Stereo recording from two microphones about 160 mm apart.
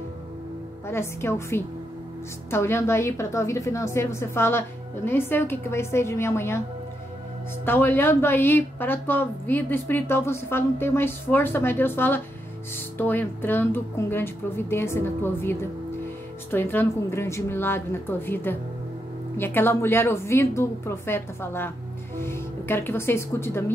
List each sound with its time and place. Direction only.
0.8 s a woman's voice: 15° left (ahead or behind)
7.6 s a woman's voice: 15° left (ahead or behind)